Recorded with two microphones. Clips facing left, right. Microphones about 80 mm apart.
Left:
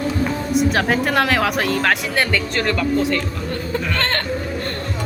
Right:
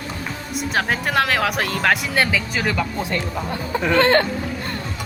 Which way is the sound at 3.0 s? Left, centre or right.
Right.